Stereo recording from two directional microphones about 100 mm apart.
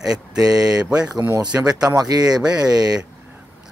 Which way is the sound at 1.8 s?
40° right (ahead or behind).